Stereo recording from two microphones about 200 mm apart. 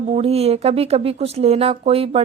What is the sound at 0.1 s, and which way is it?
Speech, 30° right (ahead or behind).